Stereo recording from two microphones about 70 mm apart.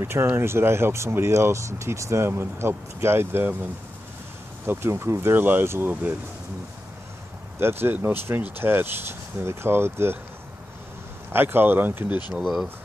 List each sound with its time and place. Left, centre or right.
0.0 s speech: right
4.6 s speech: right
7.6 s speech: right
11.3 s speech: right
12.4 s speech: centre